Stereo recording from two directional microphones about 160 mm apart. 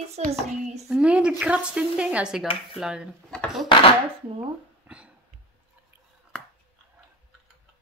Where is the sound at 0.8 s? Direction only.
5° right (ahead or behind).